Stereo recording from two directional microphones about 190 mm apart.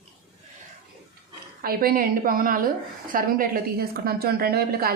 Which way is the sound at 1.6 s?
50° right (ahead or behind).